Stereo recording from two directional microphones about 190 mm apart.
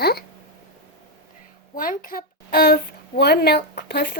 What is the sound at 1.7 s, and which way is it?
A woman's voice, 45° left (ahead or behind).